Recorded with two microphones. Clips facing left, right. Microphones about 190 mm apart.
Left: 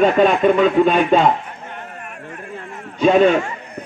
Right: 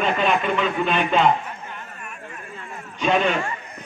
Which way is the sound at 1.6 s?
60° left (ahead or behind).